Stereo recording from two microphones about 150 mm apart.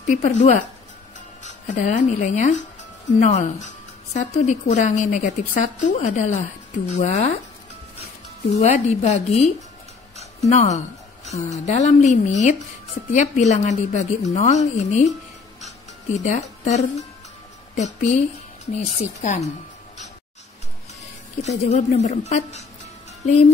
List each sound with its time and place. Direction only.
0.0 s a woman's voice: 55° left (ahead or behind)
8.5 s a woman's voice: 50° left (ahead or behind)
10.1 s music: 50° left (ahead or behind)
11.5 s a woman's voice: 50° left (ahead or behind)
15.6 s music: 50° left (ahead or behind)
17.7 s a woman's voice: 50° left (ahead or behind)
21.4 s a woman's voice: 45° left (ahead or behind)